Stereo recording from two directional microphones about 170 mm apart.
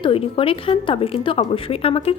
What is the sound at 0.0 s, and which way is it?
A woman's voice, 30° left (ahead or behind).